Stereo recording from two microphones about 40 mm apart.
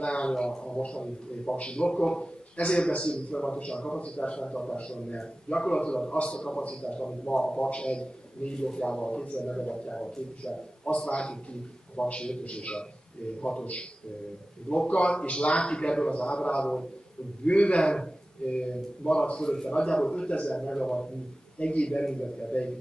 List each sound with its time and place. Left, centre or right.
0.0 s a man's voice: left